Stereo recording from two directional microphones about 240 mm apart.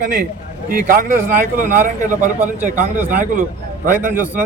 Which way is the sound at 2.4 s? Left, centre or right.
Centre.